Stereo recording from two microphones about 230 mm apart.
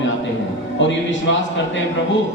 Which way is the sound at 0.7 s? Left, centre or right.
Left.